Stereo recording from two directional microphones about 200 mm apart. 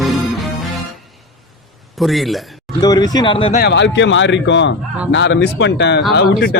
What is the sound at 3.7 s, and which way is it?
Speech, 65° left (ahead or behind).